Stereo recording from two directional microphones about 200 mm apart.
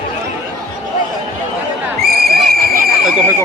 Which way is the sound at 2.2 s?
50° right (ahead or behind).